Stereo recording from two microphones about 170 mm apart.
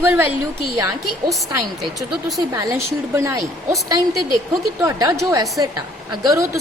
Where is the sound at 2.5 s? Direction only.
15° right (ahead or behind).